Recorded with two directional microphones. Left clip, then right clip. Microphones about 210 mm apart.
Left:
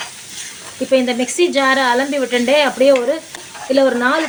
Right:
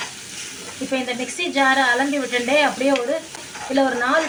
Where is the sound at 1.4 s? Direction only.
50° left (ahead or behind).